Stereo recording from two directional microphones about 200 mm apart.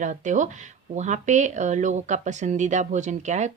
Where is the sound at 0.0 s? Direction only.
40° right (ahead or behind).